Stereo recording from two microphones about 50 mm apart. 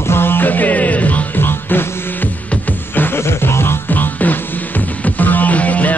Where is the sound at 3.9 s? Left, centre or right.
Left.